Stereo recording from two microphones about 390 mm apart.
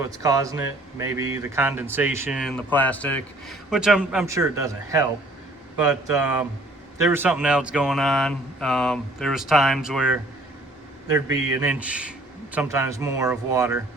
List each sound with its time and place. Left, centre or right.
0.0 s speech: centre